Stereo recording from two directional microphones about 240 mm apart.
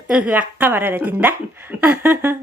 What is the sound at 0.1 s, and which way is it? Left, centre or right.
Speech, centre.